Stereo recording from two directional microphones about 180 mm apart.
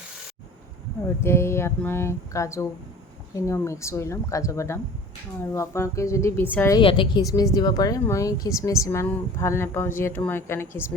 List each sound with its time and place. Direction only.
1.2 s speech: 15° left (ahead or behind)
6.7 s a woman's voice: 25° left (ahead or behind)